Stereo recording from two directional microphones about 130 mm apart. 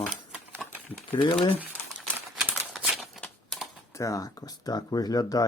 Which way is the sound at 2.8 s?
5° right (ahead or behind).